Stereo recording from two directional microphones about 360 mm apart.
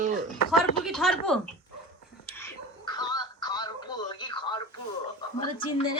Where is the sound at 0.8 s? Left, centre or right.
Centre.